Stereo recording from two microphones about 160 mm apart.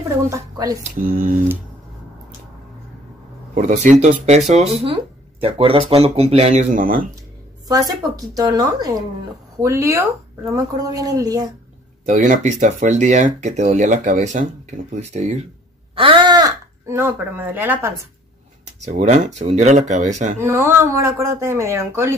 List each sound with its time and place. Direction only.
0.3 s a woman's voice: 20° right (ahead or behind)
0.9 s speech: 60° right (ahead or behind)
3.5 s speech: 50° right (ahead or behind)
7.6 s a woman's voice: 25° right (ahead or behind)
12.1 s speech: 50° right (ahead or behind)
15.9 s speech: 35° right (ahead or behind); by 17.9 s 15° right (ahead or behind)
18.9 s speech: 45° right (ahead or behind)
20.3 s speech: 15° right (ahead or behind)